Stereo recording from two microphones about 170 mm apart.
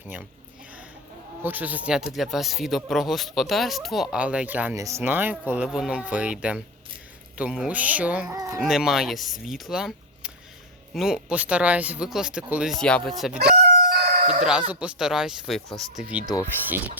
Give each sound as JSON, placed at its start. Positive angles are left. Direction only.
{"t": 1.4, "sound": "speech", "side_deg": -10}
{"t": 13.4, "sound": "chicken", "side_deg": -70}
{"t": 14.7, "sound": "speech", "side_deg": -5}